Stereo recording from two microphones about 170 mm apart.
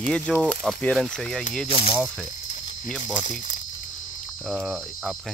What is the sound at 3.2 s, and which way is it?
Speech, 50° left (ahead or behind).